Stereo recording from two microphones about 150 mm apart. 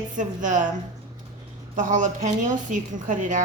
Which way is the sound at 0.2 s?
55° right (ahead or behind).